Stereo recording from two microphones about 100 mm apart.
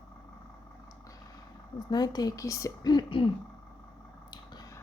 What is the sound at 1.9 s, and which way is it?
Speech, 40° left (ahead or behind).